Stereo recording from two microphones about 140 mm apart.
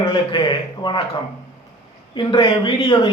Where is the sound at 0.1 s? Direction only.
35° left (ahead or behind).